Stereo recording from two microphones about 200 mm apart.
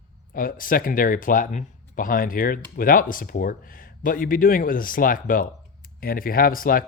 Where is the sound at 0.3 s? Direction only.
45° left (ahead or behind).